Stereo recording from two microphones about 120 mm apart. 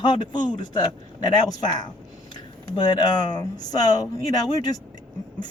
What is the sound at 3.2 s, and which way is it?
A man's voice, 35° left (ahead or behind).